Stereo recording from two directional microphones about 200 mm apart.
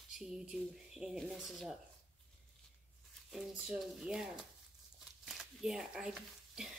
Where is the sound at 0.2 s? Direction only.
5° right (ahead or behind).